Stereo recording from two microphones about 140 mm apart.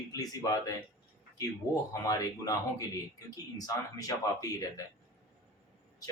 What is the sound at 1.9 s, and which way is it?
Speech, 25° left (ahead or behind).